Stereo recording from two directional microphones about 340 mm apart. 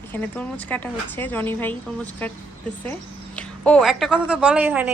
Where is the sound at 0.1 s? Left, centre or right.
Centre.